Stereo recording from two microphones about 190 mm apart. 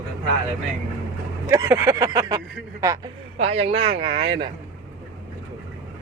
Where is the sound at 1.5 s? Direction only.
15° right (ahead or behind).